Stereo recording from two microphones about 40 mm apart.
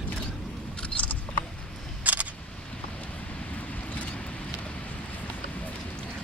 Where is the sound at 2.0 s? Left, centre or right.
Right.